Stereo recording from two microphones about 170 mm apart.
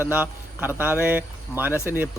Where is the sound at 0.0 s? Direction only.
10° right (ahead or behind).